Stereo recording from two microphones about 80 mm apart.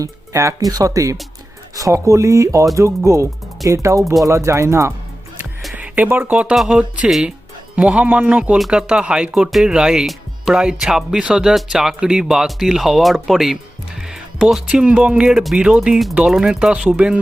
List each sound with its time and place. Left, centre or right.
0.0 s speech: right
5.7 s speech: centre
7.8 s speech: centre